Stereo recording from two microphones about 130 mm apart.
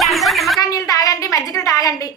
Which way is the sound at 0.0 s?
Centre (ahead or behind).